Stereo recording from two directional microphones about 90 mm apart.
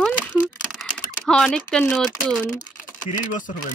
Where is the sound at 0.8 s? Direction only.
10° left (ahead or behind).